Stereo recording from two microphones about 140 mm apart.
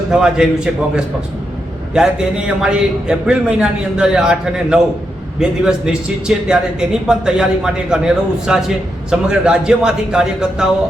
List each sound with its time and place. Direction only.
0.1 s a man's voice: 5° right (ahead or behind)